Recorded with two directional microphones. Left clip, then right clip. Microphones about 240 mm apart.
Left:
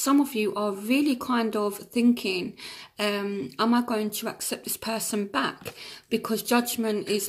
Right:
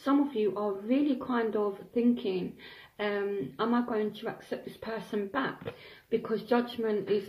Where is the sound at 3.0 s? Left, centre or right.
Left.